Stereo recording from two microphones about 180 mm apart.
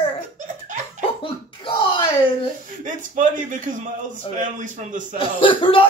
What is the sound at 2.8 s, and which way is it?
A man's voice, 45° right (ahead or behind).